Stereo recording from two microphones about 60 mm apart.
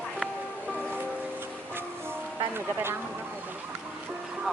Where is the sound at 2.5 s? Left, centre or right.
Right.